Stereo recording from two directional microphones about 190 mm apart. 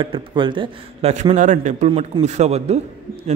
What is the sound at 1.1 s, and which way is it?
A man's voice, 40° right (ahead or behind).